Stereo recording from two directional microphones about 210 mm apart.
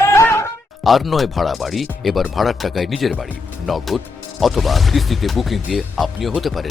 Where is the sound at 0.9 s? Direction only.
Centre (ahead or behind).